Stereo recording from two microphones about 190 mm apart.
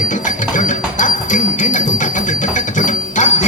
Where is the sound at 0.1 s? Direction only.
40° left (ahead or behind).